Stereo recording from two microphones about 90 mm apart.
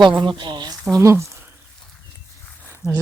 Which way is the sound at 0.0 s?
60° right (ahead or behind).